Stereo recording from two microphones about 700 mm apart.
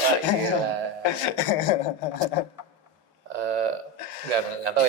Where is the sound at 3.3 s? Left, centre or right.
Right.